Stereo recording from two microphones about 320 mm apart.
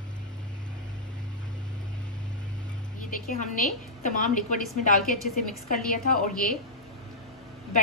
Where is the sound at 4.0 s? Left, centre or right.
Left.